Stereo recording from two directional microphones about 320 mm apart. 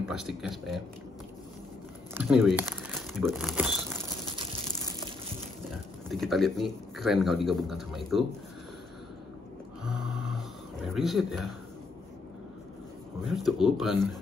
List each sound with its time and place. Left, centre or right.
0.1 s a man's voice: centre
2.1 s speech: centre
6.0 s a man's voice: centre
9.8 s a sound: centre
13.3 s a man's voice: centre